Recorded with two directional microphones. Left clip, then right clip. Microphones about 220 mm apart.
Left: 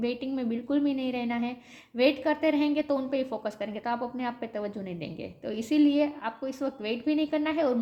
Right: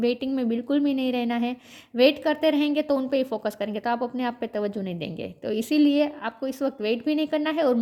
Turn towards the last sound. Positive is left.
turn(degrees=-40)  # may be behind; listen again after turning